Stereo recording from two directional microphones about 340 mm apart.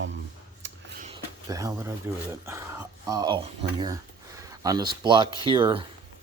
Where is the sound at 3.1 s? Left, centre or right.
Centre.